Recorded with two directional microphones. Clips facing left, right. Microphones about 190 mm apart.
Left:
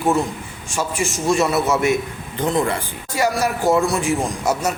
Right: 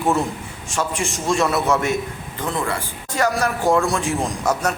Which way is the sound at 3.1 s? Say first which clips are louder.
Left 1 dB; 10° left (ahead or behind).